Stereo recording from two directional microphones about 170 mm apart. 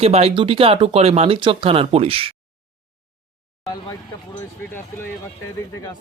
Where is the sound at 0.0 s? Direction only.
35° right (ahead or behind).